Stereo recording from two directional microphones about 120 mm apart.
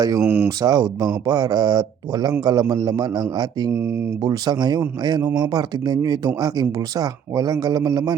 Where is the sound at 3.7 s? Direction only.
15° right (ahead or behind).